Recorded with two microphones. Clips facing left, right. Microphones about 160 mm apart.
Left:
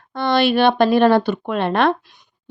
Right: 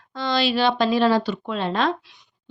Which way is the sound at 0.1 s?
60° left (ahead or behind).